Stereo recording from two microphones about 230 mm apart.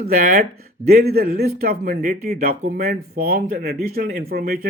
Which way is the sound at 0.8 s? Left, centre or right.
Right.